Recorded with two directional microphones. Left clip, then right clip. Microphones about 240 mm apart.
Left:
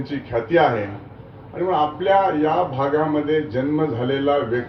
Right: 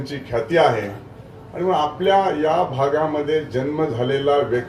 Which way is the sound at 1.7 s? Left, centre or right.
Left.